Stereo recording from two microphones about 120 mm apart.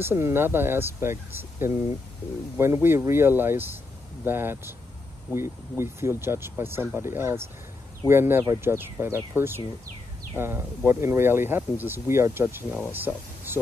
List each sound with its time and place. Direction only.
0.0 s speech: 20° right (ahead or behind)